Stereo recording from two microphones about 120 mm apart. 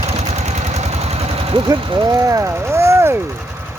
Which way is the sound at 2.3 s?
25° right (ahead or behind).